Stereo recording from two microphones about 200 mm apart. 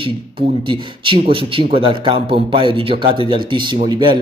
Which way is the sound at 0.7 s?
25° right (ahead or behind).